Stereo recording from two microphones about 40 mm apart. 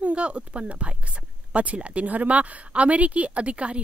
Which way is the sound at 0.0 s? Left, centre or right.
Right.